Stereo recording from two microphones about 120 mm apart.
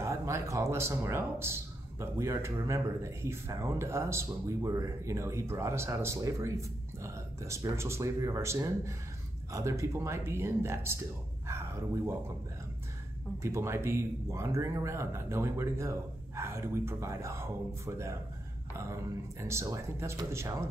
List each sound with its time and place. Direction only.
0.0 s speech: 25° right (ahead or behind)
13.4 s speech: 25° right (ahead or behind)
19.4 s speech: 25° right (ahead or behind)